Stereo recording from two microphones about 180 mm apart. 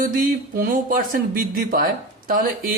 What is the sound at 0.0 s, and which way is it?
Speech, 45° right (ahead or behind).